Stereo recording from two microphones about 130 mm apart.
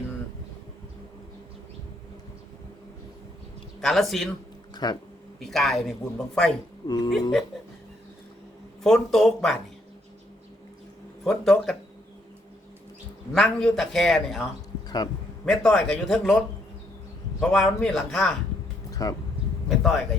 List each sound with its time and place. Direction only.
3.8 s a man's voice: centre (ahead or behind)
4.7 s a sound: 30° left (ahead or behind)
5.4 s a man's voice: centre (ahead or behind)
6.8 s speech: 30° left (ahead or behind)
7.1 s a man's voice: centre (ahead or behind)
8.8 s a man's voice: centre (ahead or behind)
11.2 s a man's voice: 5° left (ahead or behind)
13.3 s a man's voice: 5° left (ahead or behind)
14.8 s a sound: 30° left (ahead or behind)
15.4 s a man's voice: 5° left (ahead or behind)
17.4 s a man's voice: 5° left (ahead or behind)
18.9 s a sound: 30° left (ahead or behind)
19.6 s a man's voice: centre (ahead or behind)